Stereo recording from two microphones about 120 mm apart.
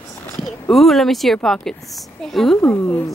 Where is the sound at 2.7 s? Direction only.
20° left (ahead or behind).